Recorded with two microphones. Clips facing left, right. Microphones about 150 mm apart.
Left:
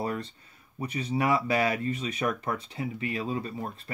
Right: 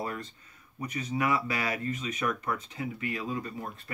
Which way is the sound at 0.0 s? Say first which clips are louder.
Left 4 dB; 35° left (ahead or behind).